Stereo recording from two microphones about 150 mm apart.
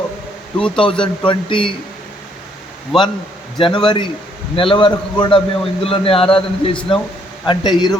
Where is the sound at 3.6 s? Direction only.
35° left (ahead or behind).